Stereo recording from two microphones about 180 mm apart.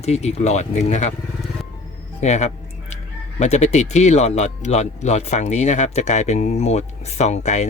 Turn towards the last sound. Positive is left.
turn(degrees=40)  # may be behind; listen again after turning